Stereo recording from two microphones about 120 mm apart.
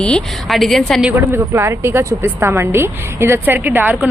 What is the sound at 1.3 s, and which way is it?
A woman's voice, 20° right (ahead or behind).